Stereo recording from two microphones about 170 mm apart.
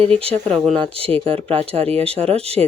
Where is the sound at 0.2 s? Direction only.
35° right (ahead or behind).